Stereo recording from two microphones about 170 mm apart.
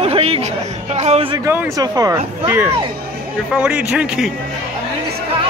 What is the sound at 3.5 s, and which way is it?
Speech, 5° right (ahead or behind).